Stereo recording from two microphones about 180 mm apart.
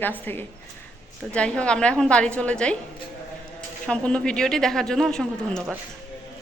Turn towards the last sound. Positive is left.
turn(degrees=5)  # may be behind; listen again after turning